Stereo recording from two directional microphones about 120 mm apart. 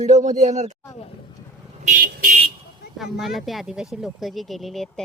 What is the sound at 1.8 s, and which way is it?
Vehicle, 90° right.